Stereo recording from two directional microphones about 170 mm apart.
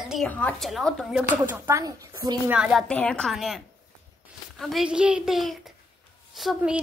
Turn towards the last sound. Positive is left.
turn(degrees=-5)  # may be behind; listen again after turning